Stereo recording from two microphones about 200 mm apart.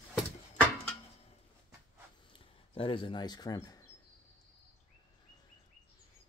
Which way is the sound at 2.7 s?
25° left (ahead or behind).